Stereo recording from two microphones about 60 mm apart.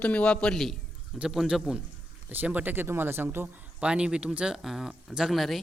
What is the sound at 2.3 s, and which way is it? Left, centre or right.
Speech, right.